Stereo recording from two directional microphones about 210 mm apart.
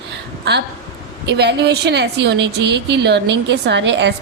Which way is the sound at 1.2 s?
55° right (ahead or behind).